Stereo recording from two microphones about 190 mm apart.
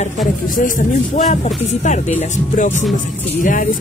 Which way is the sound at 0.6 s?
40° left (ahead or behind).